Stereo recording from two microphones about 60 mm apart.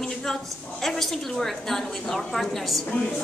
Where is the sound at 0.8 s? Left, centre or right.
Centre.